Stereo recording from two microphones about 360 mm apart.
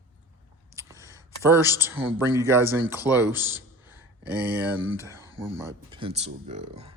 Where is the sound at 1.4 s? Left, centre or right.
Centre.